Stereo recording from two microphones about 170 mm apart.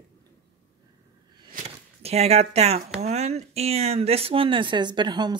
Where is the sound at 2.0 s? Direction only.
40° right (ahead or behind).